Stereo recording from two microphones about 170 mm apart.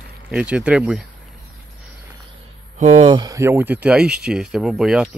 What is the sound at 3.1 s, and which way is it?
Speech, 20° right (ahead or behind).